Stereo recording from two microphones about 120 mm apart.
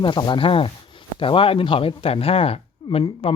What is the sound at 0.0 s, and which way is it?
Speech, 40° left (ahead or behind).